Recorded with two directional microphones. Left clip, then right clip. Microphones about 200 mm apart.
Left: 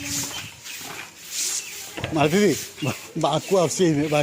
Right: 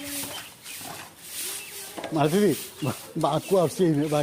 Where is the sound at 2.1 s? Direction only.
10° left (ahead or behind).